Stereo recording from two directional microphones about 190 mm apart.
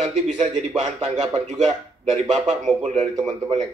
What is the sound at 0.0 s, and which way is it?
A man's voice, 35° right (ahead or behind).